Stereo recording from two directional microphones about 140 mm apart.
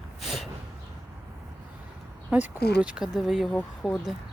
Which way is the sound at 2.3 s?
10° right (ahead or behind).